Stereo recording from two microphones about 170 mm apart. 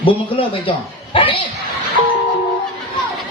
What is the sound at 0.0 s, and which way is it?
Speech, 30° left (ahead or behind).